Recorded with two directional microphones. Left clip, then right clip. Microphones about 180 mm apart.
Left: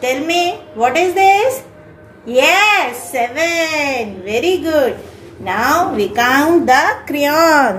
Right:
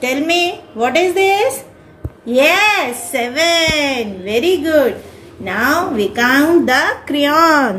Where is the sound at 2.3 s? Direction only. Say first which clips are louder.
Left 1 dB; 25° right (ahead or behind).